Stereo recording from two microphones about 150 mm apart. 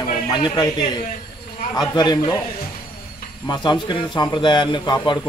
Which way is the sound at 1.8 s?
25° left (ahead or behind).